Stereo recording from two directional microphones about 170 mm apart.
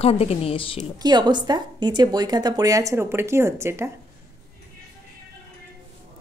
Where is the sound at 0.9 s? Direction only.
25° right (ahead or behind).